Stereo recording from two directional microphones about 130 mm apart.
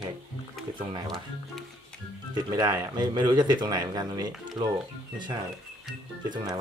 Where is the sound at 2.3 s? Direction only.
35° right (ahead or behind).